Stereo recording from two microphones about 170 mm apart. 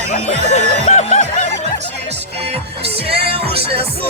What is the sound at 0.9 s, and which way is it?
Music, 40° left (ahead or behind).